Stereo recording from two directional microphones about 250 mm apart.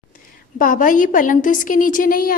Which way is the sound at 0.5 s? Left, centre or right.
Left.